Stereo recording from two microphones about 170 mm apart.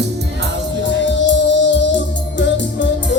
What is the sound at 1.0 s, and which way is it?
Music, 90° left.